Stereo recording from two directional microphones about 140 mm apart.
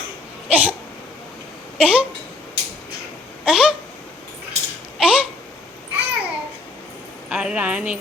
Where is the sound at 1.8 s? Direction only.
10° right (ahead or behind).